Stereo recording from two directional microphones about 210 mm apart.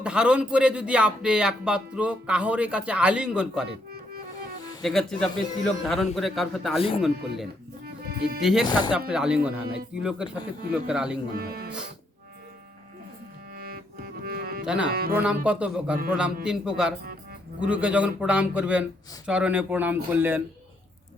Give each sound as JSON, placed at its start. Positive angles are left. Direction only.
{"t": 0.0, "sound": "a man's voice", "side_deg": -5}
{"t": 3.7, "sound": "music", "side_deg": -45}
{"t": 4.8, "sound": "a man's voice", "side_deg": 0}
{"t": 8.0, "sound": "music", "side_deg": -45}
{"t": 8.4, "sound": "a man's voice", "side_deg": 0}
{"t": 8.6, "sound": "speech", "side_deg": 20}
{"t": 8.9, "sound": "a man's voice", "side_deg": -5}
{"t": 11.3, "sound": "speech", "side_deg": -45}
{"t": 14.3, "sound": "music", "side_deg": -45}
{"t": 14.6, "sound": "a man's voice", "side_deg": -5}